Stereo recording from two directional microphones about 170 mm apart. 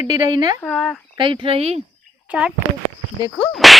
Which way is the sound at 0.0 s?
20° right (ahead or behind).